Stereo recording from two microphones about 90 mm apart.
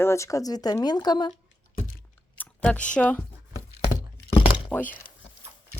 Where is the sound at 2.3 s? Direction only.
15° left (ahead or behind).